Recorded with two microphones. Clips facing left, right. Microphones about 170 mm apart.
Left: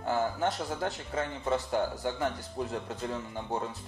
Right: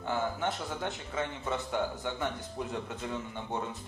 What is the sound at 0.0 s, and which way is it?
Speech, 35° left (ahead or behind).